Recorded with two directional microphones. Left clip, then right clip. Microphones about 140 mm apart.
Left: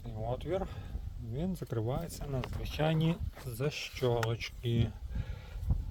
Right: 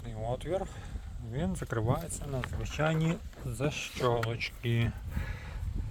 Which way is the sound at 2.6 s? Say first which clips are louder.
Right 2 dB; 45° left (ahead or behind).